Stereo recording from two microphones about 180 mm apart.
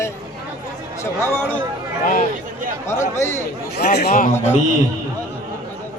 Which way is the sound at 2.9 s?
15° left (ahead or behind).